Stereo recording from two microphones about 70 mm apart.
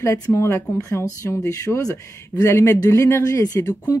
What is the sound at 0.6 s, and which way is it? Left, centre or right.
Speech, left.